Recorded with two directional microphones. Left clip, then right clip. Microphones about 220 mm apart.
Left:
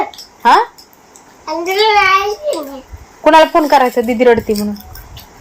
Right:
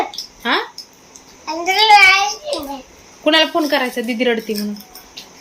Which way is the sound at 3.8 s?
40° left (ahead or behind).